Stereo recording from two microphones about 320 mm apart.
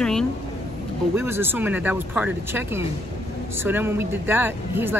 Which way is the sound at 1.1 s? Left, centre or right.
Centre.